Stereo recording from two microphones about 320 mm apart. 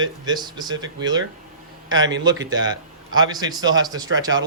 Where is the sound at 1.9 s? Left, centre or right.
Right.